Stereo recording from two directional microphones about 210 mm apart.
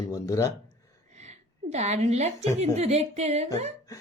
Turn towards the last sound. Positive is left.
turn(degrees=-30)  # may be behind; listen again after turning